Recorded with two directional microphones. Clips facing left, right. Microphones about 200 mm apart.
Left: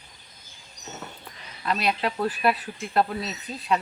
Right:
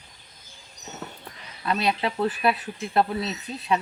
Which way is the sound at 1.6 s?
20° right (ahead or behind).